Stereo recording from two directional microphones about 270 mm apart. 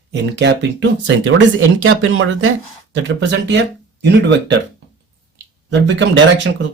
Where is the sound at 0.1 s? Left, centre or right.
Right.